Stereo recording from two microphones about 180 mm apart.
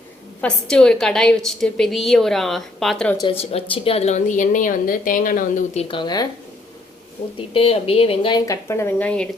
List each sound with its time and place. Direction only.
0.4 s a woman's voice: 5° left (ahead or behind)
3.2 s a woman's voice: 30° left (ahead or behind); by 5.8 s 50° left (ahead or behind)
5.9 s speech: 25° left (ahead or behind)
7.3 s speech: 30° left (ahead or behind); by 9.3 s 5° left (ahead or behind)